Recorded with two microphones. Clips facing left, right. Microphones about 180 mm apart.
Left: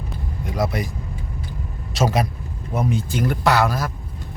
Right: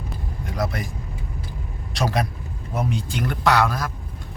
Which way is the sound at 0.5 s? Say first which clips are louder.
Left 3 dB; centre (ahead or behind).